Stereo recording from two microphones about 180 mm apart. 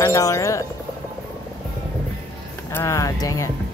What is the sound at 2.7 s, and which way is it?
Speech, 15° left (ahead or behind).